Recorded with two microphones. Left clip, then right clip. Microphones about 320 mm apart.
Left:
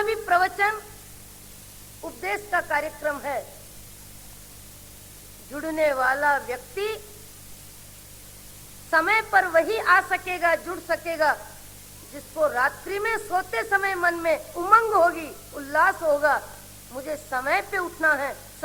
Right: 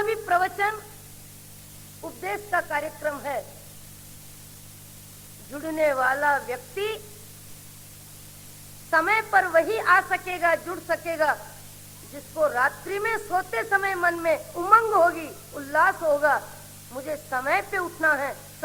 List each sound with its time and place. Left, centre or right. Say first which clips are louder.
0.0 s music: left 2 dB; right
2.0 s a sound: left 1 dB; right
5.5 s speech: even; right
8.9 s speech: left 1 dB; right